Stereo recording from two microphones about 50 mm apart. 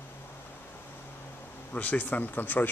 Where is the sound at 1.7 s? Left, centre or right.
Left.